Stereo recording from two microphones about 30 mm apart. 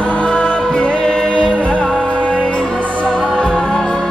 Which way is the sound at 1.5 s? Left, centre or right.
Left.